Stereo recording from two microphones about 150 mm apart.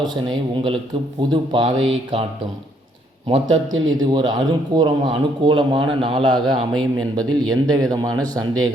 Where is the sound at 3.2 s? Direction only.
40° right (ahead or behind).